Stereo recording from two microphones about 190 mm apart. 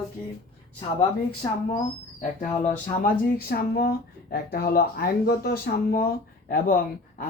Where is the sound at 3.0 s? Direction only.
55° left (ahead or behind).